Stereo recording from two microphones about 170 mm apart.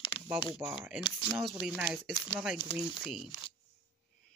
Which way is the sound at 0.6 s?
5° right (ahead or behind).